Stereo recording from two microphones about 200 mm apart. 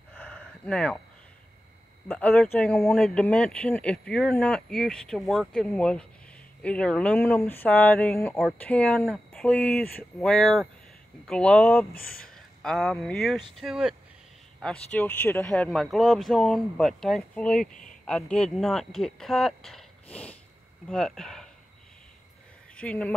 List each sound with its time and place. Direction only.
0.1 s a sound: 5° left (ahead or behind)
2.0 s speech: 5° left (ahead or behind)
11.9 s speech: 45° left (ahead or behind)
12.4 s speech: centre (ahead or behind)
22.8 s speech: 5° left (ahead or behind)